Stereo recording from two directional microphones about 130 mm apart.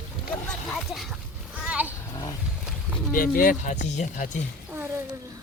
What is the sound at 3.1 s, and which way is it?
Speech, 90° left.